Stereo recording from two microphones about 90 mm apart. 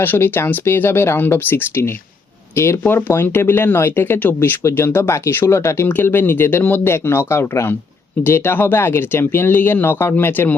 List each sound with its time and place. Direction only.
0.0 s speech: 25° left (ahead or behind)